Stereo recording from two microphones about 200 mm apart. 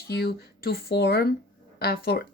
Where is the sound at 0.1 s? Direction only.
50° left (ahead or behind).